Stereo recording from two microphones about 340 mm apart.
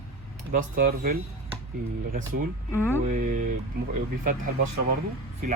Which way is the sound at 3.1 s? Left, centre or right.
Right.